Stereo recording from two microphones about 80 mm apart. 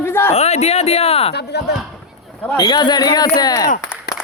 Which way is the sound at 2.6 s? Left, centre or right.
Left.